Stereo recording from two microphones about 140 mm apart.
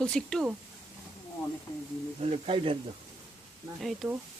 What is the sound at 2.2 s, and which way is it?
Speech, 45° right (ahead or behind).